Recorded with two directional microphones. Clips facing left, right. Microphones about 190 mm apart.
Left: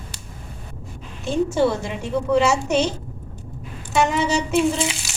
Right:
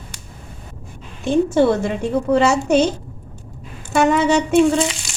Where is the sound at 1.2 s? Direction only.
55° right (ahead or behind).